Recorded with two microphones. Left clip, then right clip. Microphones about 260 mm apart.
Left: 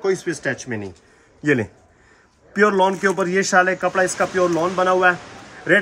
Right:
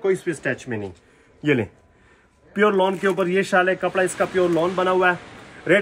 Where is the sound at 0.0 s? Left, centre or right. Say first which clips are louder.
Left 1 dB; centre.